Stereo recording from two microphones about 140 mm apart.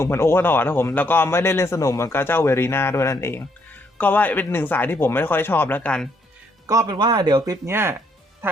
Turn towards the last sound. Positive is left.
turn(degrees=-15)  # may be behind; listen again after turning